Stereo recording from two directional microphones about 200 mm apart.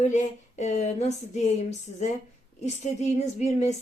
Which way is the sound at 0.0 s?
35° left (ahead or behind).